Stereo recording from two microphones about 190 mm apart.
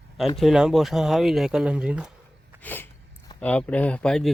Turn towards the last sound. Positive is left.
turn(degrees=5)  # may be behind; listen again after turning